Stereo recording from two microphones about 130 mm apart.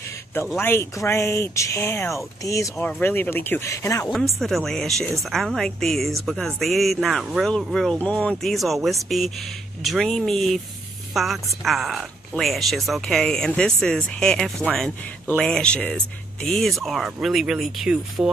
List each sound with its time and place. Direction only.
0.6 s speech: 15° left (ahead or behind)
2.8 s speech: 15° left (ahead or behind)
4.4 s speech: centre (ahead or behind)